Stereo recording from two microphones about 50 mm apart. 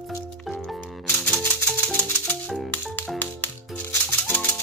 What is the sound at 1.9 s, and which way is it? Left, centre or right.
Music, left.